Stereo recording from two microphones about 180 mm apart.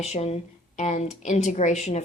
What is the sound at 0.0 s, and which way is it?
Speech, 35° left (ahead or behind).